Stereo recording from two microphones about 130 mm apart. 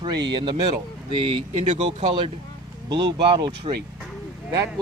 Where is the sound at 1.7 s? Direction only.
60° right (ahead or behind).